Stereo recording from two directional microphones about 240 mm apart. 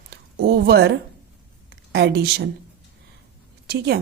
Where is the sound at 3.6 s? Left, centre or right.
Right.